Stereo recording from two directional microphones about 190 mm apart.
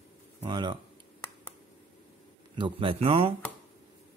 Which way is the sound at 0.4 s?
25° right (ahead or behind).